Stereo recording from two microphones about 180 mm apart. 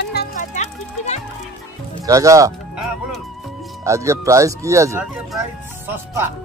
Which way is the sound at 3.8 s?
15° right (ahead or behind).